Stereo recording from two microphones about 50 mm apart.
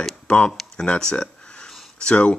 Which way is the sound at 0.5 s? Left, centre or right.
Centre.